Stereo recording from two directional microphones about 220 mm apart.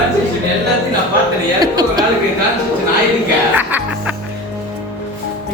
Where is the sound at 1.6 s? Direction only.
20° right (ahead or behind).